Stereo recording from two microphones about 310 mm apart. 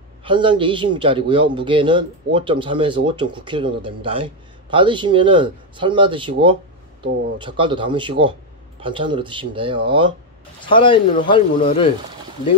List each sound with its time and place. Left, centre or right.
0.2 s a man's voice: centre
10.7 s speech: centre